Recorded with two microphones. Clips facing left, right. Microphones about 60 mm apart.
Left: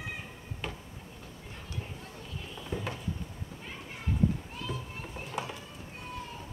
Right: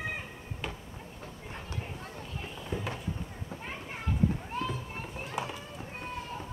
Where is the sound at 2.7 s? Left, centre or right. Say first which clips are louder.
Even; centre.